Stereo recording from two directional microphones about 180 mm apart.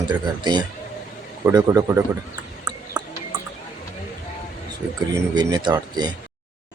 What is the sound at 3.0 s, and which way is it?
Music, 5° right (ahead or behind).